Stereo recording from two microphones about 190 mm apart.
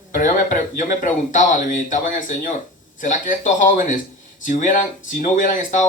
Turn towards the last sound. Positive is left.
turn(degrees=40)  # may be behind; listen again after turning